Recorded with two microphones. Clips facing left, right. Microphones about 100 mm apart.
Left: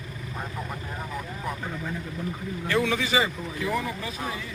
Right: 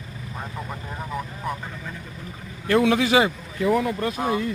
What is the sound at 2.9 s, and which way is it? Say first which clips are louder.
Speech: right 6 dB; 60° right (ahead or behind).